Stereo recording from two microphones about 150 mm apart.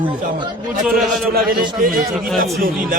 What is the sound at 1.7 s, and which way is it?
Speech, 70° right (ahead or behind).